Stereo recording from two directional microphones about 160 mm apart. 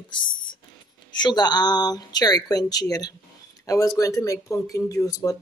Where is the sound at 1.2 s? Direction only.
25° left (ahead or behind).